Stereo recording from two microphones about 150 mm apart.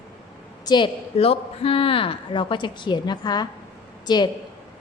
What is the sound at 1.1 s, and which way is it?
A woman's voice, 40° left (ahead or behind).